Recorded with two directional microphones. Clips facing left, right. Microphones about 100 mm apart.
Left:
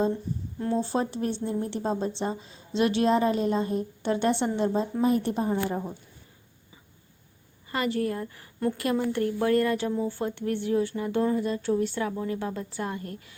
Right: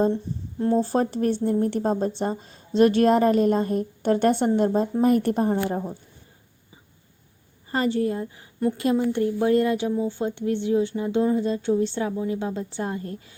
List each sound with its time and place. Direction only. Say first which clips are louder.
0.6 s a woman's voice: right 5 dB; 40° right (ahead or behind); by 5.7 s 55° right (ahead or behind)
7.7 s speech: right 4 dB; 30° right (ahead or behind)